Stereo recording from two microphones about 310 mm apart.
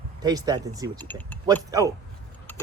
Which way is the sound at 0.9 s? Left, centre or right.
Centre.